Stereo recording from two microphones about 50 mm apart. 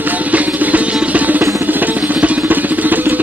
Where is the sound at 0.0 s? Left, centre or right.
Right.